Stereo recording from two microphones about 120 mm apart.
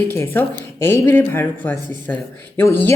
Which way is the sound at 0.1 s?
20° left (ahead or behind).